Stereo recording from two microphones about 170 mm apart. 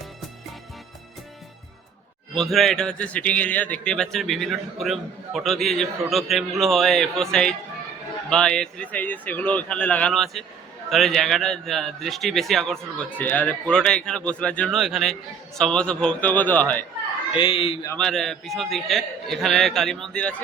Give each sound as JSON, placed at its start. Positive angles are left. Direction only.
{"t": 2.3, "sound": "a man's voice", "side_deg": 0}
{"t": 17.3, "sound": "speech", "side_deg": 30}
{"t": 17.9, "sound": "a man's voice", "side_deg": 5}